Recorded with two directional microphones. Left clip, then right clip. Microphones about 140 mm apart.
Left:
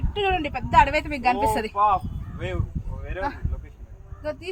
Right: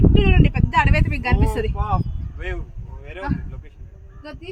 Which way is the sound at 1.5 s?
65° left (ahead or behind).